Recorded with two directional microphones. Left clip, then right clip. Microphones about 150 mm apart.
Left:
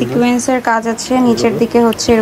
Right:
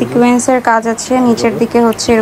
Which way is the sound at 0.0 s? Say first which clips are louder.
Right 3 dB; 5° left (ahead or behind).